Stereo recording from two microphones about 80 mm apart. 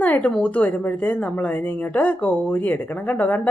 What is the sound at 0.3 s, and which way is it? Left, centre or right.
A woman's voice, centre.